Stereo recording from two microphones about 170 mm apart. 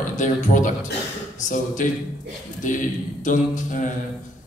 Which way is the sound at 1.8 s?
50° left (ahead or behind).